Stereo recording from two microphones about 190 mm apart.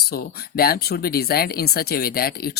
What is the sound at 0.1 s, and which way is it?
Speech, 55° left (ahead or behind).